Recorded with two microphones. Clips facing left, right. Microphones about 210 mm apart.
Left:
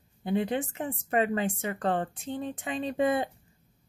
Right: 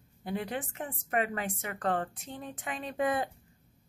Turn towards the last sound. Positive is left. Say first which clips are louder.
# left 4 dB
turn(degrees=25)  # may be behind; listen again after turning